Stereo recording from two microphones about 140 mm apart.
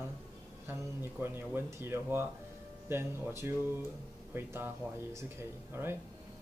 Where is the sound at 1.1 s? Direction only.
15° right (ahead or behind).